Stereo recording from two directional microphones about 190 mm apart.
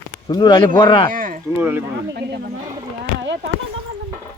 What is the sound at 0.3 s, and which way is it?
Speech, 20° left (ahead or behind).